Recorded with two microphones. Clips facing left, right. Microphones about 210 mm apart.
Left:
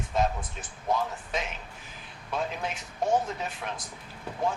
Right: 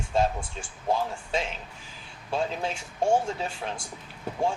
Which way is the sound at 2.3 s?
30° right (ahead or behind).